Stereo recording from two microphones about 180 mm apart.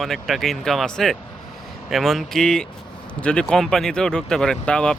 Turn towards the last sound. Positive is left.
turn(degrees=5)  # may be behind; listen again after turning